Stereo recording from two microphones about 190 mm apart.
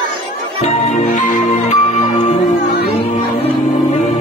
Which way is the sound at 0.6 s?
35° left (ahead or behind).